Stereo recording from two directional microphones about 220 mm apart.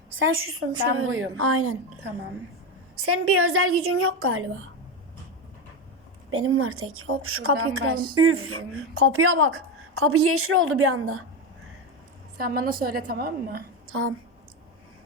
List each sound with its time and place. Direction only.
0.2 s a woman's voice: 65° right (ahead or behind)
3.0 s a woman's voice: 85° right
6.3 s a woman's voice: 70° right (ahead or behind)
12.4 s a woman's voice: 40° right (ahead or behind)
13.8 s speech: 70° right (ahead or behind)